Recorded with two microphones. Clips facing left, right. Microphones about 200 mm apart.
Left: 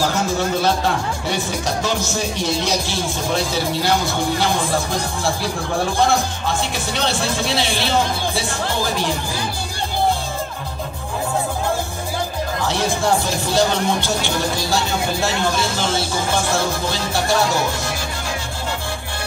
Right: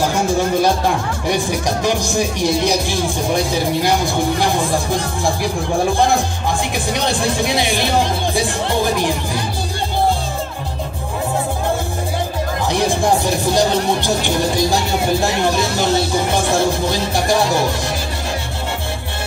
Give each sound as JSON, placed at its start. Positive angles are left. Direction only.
{"t": 0.6, "sound": "speech", "side_deg": -15}
{"t": 6.9, "sound": "speech", "side_deg": -15}
{"t": 12.6, "sound": "speech", "side_deg": -15}